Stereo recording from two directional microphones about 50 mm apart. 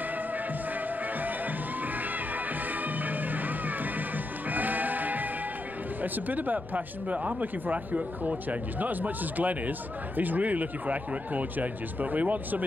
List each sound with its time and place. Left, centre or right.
2.7 s music: right
6.1 s speech: right